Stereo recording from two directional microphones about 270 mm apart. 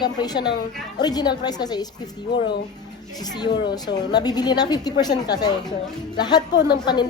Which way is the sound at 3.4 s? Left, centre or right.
Centre.